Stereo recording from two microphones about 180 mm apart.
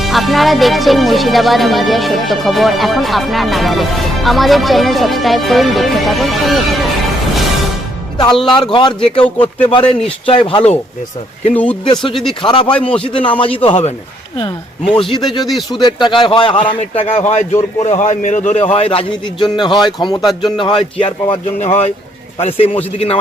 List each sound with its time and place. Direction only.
0.0 s speech: centre (ahead or behind)
8.7 s speech: 25° left (ahead or behind)
11.5 s speech: 5° left (ahead or behind)
12.4 s speech: 25° left (ahead or behind)
12.7 s speech: 5° left (ahead or behind)
13.0 s a man's voice: 30° left (ahead or behind)
14.9 s a man's voice: 25° left (ahead or behind)